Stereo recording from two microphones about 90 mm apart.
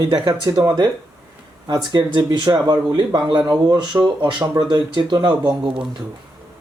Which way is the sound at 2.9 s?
65° right (ahead or behind).